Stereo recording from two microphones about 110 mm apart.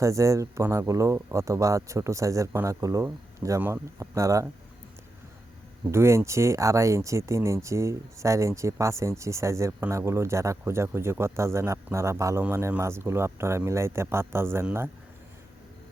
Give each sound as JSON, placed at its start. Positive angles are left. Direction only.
{"t": 0.0, "sound": "a man's voice", "side_deg": -30}
{"t": 5.9, "sound": "a man's voice", "side_deg": -25}